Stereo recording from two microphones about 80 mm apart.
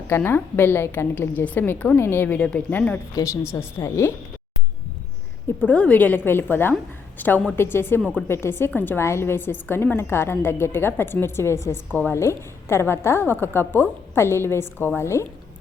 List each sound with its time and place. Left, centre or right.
0.3 s a woman's voice: left
3.4 s a woman's voice: left
5.6 s a woman's voice: centre; by 15.2 s left